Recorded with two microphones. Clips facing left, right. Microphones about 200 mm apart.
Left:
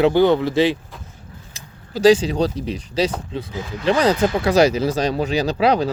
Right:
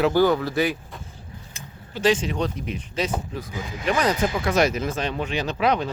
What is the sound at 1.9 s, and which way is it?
Speech, 35° left (ahead or behind).